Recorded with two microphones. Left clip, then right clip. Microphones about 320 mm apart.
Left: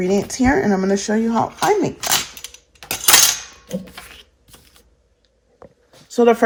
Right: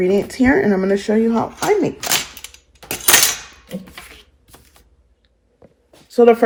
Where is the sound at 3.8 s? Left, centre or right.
Centre.